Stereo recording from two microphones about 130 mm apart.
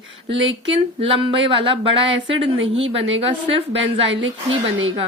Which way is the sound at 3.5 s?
45° right (ahead or behind).